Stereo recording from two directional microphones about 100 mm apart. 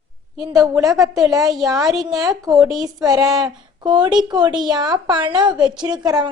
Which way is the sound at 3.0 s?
40° right (ahead or behind).